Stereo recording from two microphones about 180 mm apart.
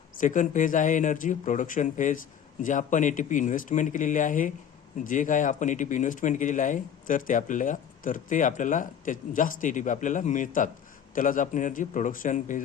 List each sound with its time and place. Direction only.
0.2 s speech: 45° left (ahead or behind)